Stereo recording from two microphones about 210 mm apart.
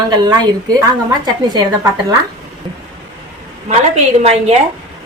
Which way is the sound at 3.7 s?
30° right (ahead or behind).